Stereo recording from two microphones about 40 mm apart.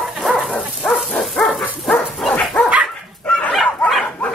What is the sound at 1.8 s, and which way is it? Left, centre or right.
Dog, left.